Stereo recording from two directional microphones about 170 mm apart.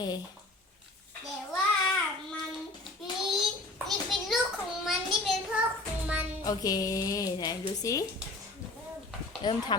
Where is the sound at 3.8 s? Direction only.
Centre (ahead or behind).